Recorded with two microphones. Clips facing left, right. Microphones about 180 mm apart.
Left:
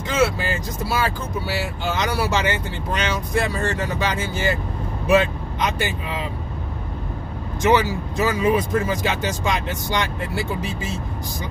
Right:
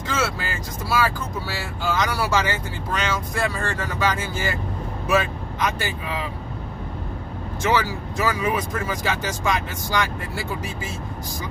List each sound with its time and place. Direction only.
0.1 s speech: 20° left (ahead or behind)
7.6 s speech: 20° left (ahead or behind)